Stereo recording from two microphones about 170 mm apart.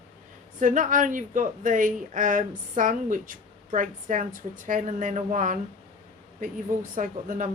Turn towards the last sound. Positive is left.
turn(degrees=-50)  # may be behind; listen again after turning